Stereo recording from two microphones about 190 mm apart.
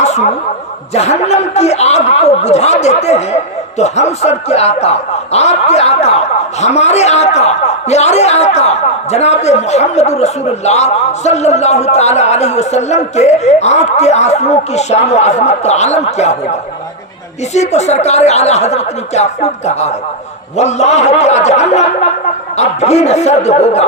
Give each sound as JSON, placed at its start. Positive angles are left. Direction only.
{"t": 0.0, "sound": "chuckle", "side_deg": 35}
{"t": 0.9, "sound": "speech", "side_deg": 35}